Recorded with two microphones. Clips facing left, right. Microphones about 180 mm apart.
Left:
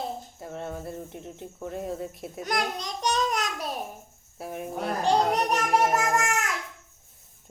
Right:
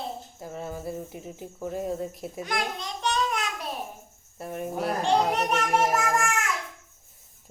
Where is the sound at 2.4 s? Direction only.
40° left (ahead or behind).